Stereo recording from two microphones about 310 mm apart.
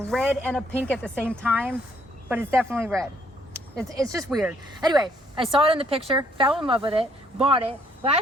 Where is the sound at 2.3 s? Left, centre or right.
Centre.